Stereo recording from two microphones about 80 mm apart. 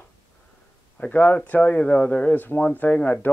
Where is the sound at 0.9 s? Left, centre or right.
Left.